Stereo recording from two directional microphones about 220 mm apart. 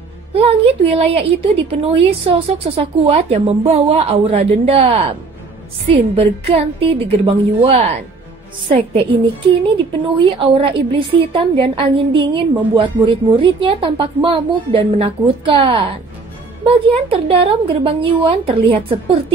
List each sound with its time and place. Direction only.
0.3 s a woman's voice: 25° right (ahead or behind)
10.0 s speech: 20° right (ahead or behind)